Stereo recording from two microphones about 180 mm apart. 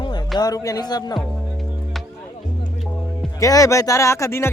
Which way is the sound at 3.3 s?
20° left (ahead or behind).